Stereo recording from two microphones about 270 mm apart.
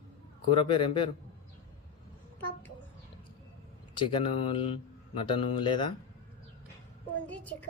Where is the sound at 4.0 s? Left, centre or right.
Centre.